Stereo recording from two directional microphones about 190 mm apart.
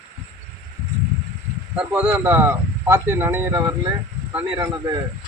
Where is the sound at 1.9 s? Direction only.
10° right (ahead or behind).